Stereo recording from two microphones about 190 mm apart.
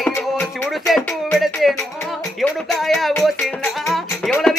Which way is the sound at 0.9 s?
Centre (ahead or behind).